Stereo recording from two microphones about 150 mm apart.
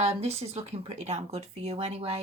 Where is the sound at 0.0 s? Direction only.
45° right (ahead or behind).